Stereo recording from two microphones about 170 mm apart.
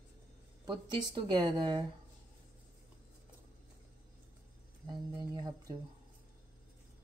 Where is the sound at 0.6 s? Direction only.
25° right (ahead or behind).